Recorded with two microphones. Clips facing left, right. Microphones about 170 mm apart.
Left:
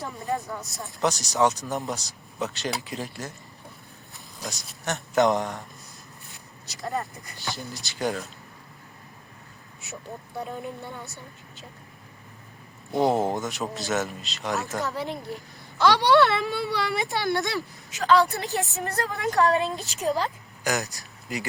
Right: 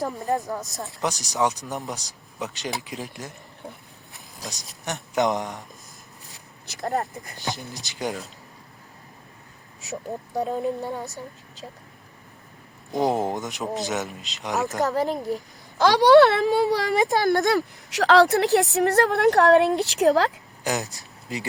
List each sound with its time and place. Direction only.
0.0 s speech: 40° right (ahead or behind)
0.6 s speech: 20° right (ahead or behind)
4.9 s speech: 15° right (ahead or behind)
6.7 s speech: 60° right (ahead or behind)
7.3 s speech: 15° right (ahead or behind)
9.9 s speech: 40° right (ahead or behind)
12.9 s speech: 15° right (ahead or behind)
14.8 s speech: 40° right (ahead or behind)
17.9 s a woman's voice: 80° right
20.7 s speech: 25° right (ahead or behind)